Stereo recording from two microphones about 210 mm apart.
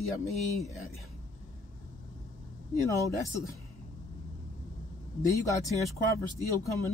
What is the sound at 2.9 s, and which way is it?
Speech, 15° left (ahead or behind).